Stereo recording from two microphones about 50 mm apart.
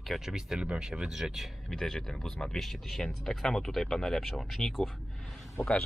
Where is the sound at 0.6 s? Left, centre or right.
Centre.